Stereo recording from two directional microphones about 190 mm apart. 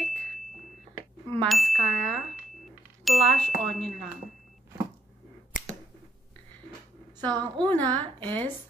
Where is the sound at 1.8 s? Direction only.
40° right (ahead or behind).